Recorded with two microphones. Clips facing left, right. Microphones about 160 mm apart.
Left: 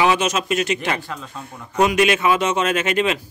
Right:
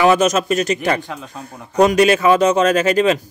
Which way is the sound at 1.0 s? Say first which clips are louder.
Right 2 dB; 15° right (ahead or behind).